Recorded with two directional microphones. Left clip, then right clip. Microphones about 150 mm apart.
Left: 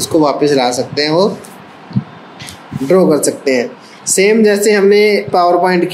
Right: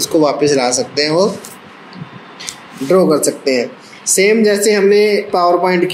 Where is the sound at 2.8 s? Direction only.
5° left (ahead or behind).